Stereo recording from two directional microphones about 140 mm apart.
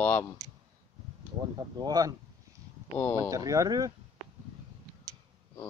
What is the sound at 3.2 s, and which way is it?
Speech, 25° right (ahead or behind).